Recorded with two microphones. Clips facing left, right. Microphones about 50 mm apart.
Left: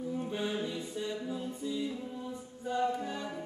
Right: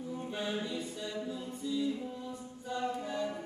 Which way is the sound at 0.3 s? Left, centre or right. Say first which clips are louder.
Right 2 dB; centre.